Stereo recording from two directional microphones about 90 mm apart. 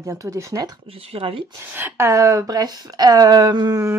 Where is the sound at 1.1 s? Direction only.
90° right.